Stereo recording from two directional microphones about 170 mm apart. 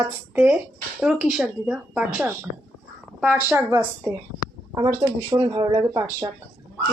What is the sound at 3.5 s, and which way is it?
Speech, 15° right (ahead or behind).